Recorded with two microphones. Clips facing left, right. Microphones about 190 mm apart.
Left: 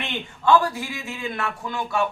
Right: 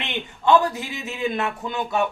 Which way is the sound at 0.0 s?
20° right (ahead or behind).